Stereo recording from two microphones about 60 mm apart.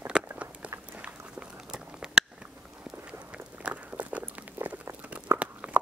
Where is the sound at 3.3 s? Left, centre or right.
Right.